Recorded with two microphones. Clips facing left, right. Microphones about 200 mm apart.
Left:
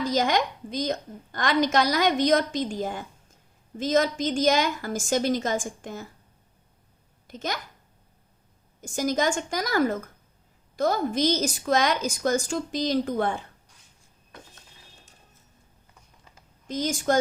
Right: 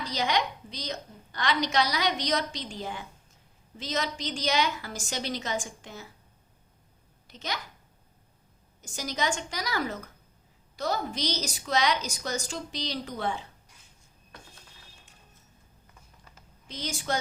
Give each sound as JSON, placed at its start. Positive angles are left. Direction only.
{"t": 0.0, "sound": "a woman's voice", "side_deg": 45}
{"t": 7.3, "sound": "speech", "side_deg": 50}
{"t": 8.8, "sound": "a woman's voice", "side_deg": 50}
{"t": 16.6, "sound": "a woman's voice", "side_deg": 45}